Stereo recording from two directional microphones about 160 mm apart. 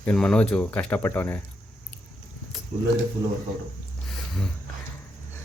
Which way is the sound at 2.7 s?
55° right (ahead or behind).